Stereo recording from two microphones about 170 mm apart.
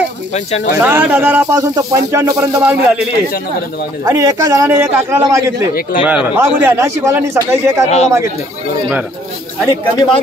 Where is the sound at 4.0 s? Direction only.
20° right (ahead or behind).